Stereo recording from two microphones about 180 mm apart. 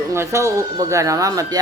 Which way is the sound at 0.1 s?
15° right (ahead or behind).